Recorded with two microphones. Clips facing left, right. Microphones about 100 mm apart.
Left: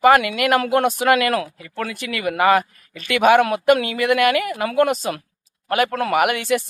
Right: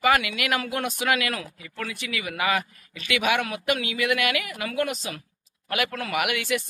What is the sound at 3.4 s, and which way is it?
Speech, 55° left (ahead or behind).